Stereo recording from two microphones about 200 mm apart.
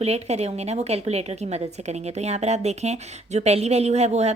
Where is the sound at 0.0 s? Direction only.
30° right (ahead or behind).